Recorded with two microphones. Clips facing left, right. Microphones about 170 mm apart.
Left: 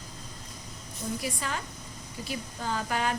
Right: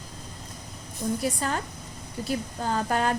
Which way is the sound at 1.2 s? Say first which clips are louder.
Right 6 dB; 45° right (ahead or behind).